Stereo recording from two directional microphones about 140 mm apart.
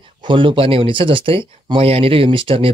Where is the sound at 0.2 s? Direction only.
35° right (ahead or behind).